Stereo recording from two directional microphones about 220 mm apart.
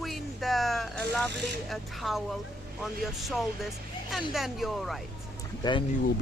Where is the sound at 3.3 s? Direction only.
Centre (ahead or behind).